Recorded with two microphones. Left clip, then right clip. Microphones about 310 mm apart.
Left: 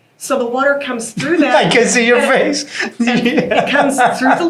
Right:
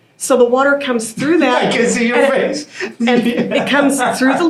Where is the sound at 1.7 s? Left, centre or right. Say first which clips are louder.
Left 4 dB; left.